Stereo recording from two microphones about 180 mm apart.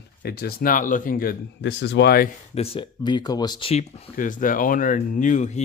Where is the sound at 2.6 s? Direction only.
30° left (ahead or behind).